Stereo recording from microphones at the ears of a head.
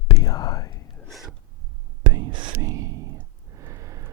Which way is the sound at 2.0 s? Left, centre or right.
Right.